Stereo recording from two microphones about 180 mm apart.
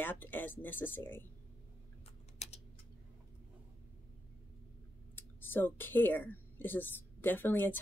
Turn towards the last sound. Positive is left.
turn(degrees=10)  # may be behind; listen again after turning